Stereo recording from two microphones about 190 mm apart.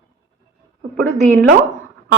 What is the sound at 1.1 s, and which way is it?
Speech, 35° right (ahead or behind).